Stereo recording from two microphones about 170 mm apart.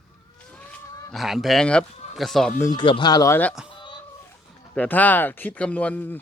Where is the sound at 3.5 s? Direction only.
5° right (ahead or behind).